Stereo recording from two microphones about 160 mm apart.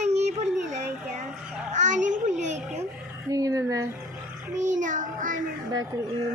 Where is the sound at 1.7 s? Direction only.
50° right (ahead or behind).